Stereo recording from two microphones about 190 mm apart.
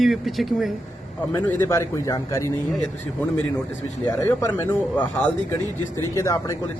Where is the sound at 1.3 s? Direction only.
15° left (ahead or behind).